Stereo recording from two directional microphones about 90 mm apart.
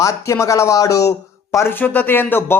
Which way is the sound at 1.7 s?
20° left (ahead or behind).